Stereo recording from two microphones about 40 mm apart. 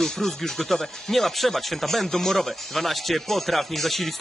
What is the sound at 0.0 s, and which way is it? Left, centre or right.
Speech, centre.